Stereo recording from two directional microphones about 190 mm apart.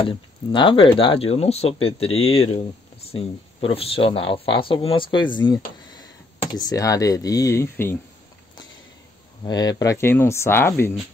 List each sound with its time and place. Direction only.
0.0 s speech: 25° left (ahead or behind)
9.4 s speech: 20° left (ahead or behind)